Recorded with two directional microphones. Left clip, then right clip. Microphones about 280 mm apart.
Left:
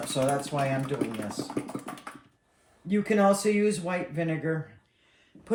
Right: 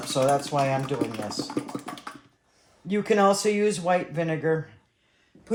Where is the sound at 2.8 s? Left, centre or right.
Right.